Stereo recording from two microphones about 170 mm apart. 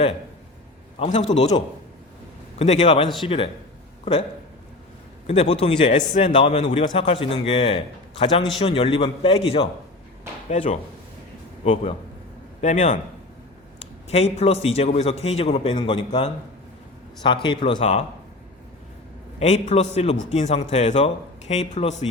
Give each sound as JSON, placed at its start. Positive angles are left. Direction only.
{"t": 0.9, "sound": "a man's voice", "side_deg": 35}
{"t": 2.6, "sound": "a man's voice", "side_deg": 40}
{"t": 5.2, "sound": "a man's voice", "side_deg": 35}
{"t": 10.5, "sound": "a man's voice", "side_deg": 45}
{"t": 11.6, "sound": "a man's voice", "side_deg": 35}
{"t": 17.7, "sound": "a man's voice", "side_deg": 40}
{"t": 19.4, "sound": "a man's voice", "side_deg": 40}